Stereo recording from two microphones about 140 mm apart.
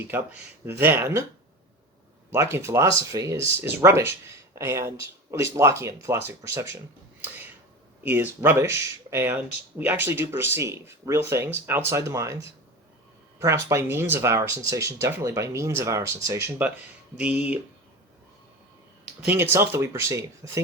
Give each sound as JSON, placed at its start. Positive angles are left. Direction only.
{"t": 0.0, "sound": "speech", "side_deg": -15}
{"t": 2.3, "sound": "speech", "side_deg": -20}
{"t": 19.0, "sound": "speech", "side_deg": -10}